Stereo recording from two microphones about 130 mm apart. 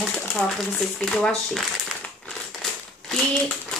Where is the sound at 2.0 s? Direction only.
5° left (ahead or behind).